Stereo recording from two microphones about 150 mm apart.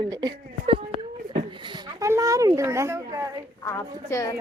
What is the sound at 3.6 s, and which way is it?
Speech, 20° left (ahead or behind).